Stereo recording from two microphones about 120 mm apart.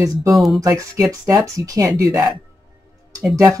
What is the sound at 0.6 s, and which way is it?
A woman's voice, 30° right (ahead or behind).